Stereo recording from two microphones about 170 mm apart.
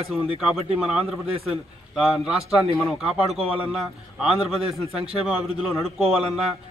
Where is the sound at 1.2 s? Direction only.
35° right (ahead or behind).